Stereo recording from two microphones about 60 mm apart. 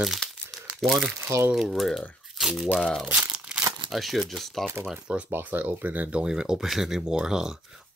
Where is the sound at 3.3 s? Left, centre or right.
Centre.